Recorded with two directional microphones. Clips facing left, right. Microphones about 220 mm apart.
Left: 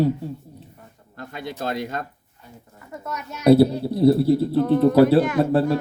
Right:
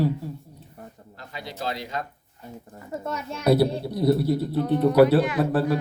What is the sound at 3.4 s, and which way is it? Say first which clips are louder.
A man's voice: left 6 dB; 25° left (ahead or behind).